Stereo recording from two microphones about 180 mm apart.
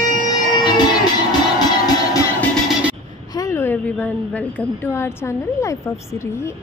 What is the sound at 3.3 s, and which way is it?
A woman's voice, 20° left (ahead or behind).